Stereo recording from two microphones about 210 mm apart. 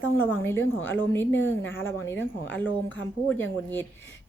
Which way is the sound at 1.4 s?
65° left (ahead or behind).